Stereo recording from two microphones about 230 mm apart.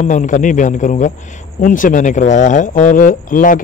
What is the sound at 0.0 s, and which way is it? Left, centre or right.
Speech, left.